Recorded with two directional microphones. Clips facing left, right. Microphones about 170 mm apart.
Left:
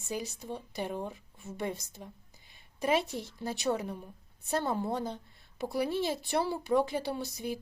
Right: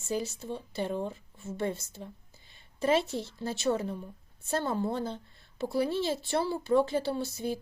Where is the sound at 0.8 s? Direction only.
10° left (ahead or behind).